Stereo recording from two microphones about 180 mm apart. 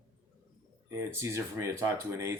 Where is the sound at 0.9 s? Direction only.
15° right (ahead or behind).